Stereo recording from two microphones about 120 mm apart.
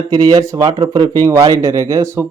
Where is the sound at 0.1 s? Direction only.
30° right (ahead or behind).